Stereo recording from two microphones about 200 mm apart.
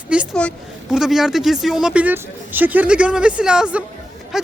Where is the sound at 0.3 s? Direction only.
Centre (ahead or behind).